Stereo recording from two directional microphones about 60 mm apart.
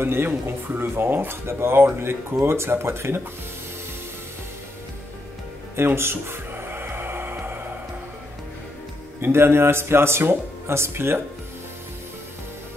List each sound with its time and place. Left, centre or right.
0.0 s speech: right
5.8 s music: right
9.2 s speech: right